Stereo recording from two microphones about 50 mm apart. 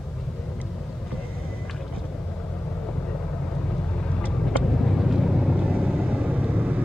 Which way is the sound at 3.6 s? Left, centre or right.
Left.